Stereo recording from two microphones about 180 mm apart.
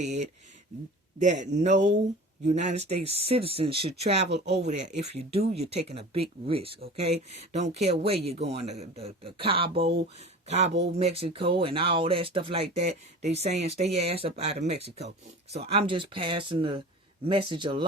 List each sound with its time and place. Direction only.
0.0 s speech: 40° right (ahead or behind)